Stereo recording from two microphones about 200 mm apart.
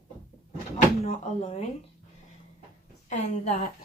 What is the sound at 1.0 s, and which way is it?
Speech, 35° left (ahead or behind).